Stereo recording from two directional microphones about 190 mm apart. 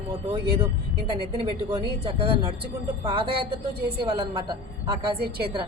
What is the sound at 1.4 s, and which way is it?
Speech, 30° right (ahead or behind).